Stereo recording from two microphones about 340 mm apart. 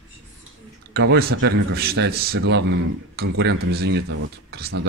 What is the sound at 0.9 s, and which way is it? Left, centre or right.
A man's voice, right.